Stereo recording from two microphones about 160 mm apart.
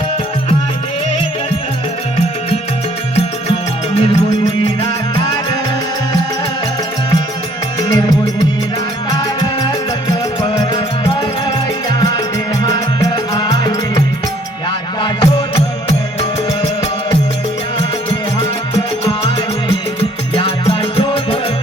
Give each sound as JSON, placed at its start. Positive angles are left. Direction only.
{"t": 4.8, "sound": "music", "side_deg": 25}
{"t": 7.8, "sound": "music", "side_deg": 25}
{"t": 9.0, "sound": "music", "side_deg": 25}
{"t": 15.0, "sound": "music", "side_deg": 30}
{"t": 19.2, "sound": "music", "side_deg": 35}